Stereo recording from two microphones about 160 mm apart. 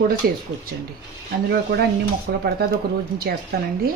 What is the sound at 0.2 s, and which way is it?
Speech, 70° right (ahead or behind).